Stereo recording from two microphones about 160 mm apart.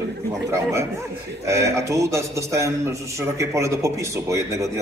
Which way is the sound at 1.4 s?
20° right (ahead or behind).